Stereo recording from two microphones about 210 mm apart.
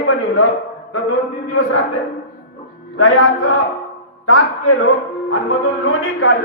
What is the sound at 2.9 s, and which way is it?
A man's voice, 75° left (ahead or behind).